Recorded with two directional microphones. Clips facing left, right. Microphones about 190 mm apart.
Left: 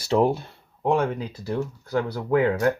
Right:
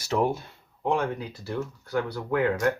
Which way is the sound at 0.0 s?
30° left (ahead or behind).